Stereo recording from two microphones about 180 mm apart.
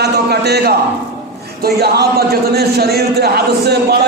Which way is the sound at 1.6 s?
60° right (ahead or behind).